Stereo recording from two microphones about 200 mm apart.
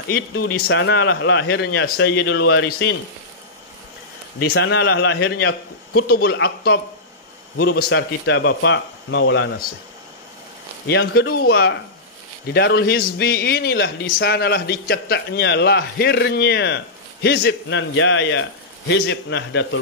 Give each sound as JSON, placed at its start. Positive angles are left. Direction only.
{"t": 0.4, "sound": "a man's voice", "side_deg": 55}
{"t": 4.4, "sound": "a man's voice", "side_deg": 60}
{"t": 10.9, "sound": "a man's voice", "side_deg": 55}